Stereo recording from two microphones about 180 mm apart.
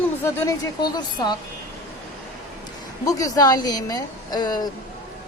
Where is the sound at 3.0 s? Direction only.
20° left (ahead or behind).